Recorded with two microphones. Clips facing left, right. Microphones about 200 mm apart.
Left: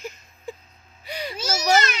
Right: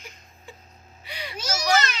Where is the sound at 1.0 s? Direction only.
40° left (ahead or behind).